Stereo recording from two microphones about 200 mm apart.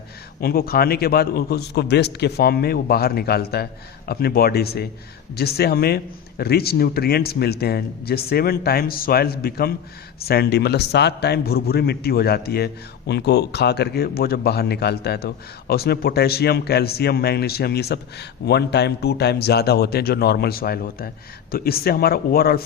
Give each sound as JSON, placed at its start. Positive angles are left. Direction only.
{"t": 0.3, "sound": "a man's voice", "side_deg": 50}